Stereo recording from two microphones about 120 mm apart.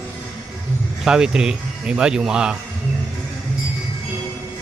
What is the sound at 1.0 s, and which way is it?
Speech, 5° right (ahead or behind).